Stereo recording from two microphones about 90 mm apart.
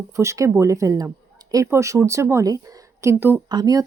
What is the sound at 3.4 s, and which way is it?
Speech, 50° right (ahead or behind).